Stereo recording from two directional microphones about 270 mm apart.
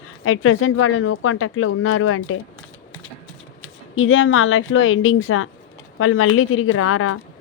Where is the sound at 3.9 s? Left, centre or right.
Left.